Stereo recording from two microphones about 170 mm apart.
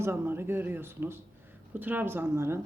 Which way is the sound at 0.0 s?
15° right (ahead or behind).